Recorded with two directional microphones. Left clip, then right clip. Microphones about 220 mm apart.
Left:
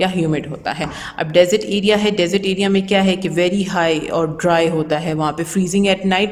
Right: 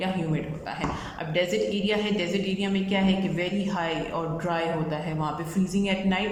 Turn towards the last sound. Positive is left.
turn(degrees=50)  # may be behind; listen again after turning